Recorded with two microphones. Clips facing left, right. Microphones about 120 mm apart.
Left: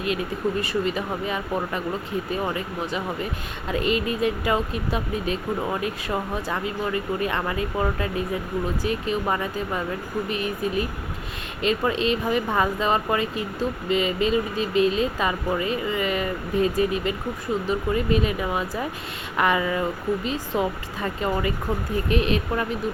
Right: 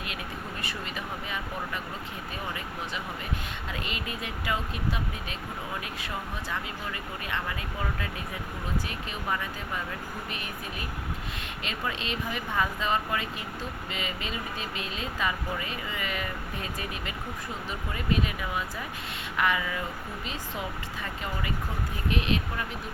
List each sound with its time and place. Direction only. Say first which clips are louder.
0.6 s speech: left 11 dB; 35° left (ahead or behind)